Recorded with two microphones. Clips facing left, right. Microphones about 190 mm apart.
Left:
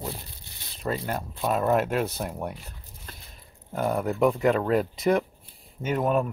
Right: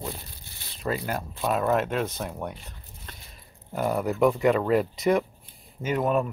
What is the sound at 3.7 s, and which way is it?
Speech, centre (ahead or behind).